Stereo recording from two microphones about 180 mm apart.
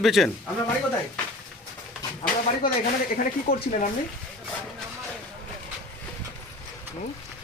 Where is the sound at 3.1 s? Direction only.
50° left (ahead or behind).